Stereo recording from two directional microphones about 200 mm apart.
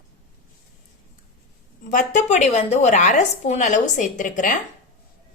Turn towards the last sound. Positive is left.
turn(degrees=40)  # may be behind; listen again after turning